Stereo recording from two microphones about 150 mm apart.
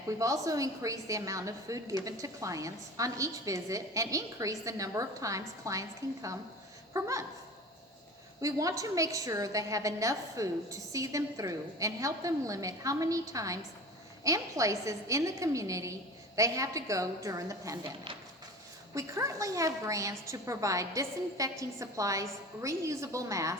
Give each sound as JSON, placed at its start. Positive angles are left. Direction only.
{"t": 0.2, "sound": "a woman's voice", "side_deg": -20}
{"t": 8.4, "sound": "a woman's voice", "side_deg": -20}
{"t": 18.9, "sound": "a woman's voice", "side_deg": -20}